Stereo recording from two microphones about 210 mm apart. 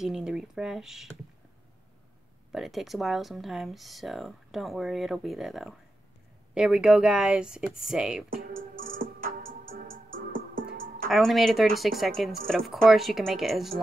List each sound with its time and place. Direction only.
0.0 s speech: 5° right (ahead or behind)
2.5 s speech: centre (ahead or behind)
8.5 s music: 40° right (ahead or behind)
11.1 s speech: centre (ahead or behind)